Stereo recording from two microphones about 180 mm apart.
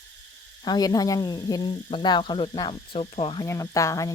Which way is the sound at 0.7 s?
20° left (ahead or behind).